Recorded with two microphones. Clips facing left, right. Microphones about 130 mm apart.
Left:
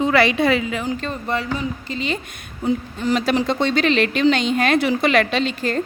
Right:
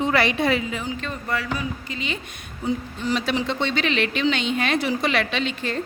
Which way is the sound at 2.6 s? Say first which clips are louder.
Left 4 dB; 50° left (ahead or behind).